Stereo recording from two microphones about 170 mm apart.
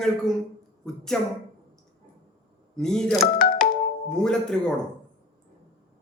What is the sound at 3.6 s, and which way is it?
Music, 5° left (ahead or behind).